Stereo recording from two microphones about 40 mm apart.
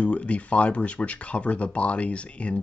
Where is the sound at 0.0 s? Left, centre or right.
Left.